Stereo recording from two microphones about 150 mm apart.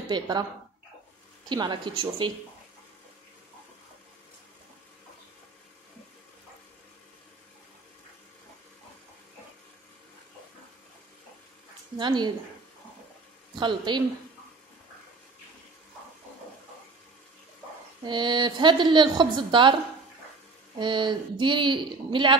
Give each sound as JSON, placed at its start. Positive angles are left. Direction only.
{"t": 0.1, "sound": "speech", "side_deg": -30}
{"t": 1.5, "sound": "a woman's voice", "side_deg": -30}
{"t": 12.0, "sound": "a woman's voice", "side_deg": -30}
{"t": 13.6, "sound": "a woman's voice", "side_deg": -30}
{"t": 18.0, "sound": "a woman's voice", "side_deg": -30}
{"t": 20.8, "sound": "a woman's voice", "side_deg": -30}